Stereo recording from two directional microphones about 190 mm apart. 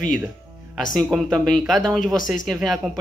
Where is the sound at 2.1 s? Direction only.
45° left (ahead or behind).